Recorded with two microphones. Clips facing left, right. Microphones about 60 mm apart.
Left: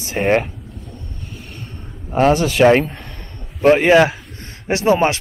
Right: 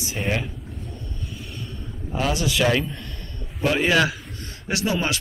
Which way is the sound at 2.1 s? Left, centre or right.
Left.